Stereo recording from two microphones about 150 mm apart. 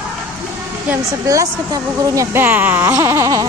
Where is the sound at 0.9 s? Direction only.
20° right (ahead or behind).